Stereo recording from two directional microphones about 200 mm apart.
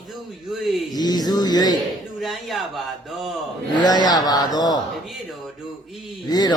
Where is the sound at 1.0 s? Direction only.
20° left (ahead or behind).